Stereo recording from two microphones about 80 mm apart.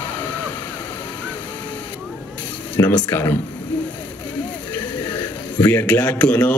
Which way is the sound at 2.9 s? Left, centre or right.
Left.